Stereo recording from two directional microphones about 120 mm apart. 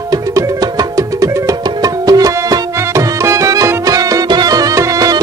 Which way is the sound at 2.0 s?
30° right (ahead or behind).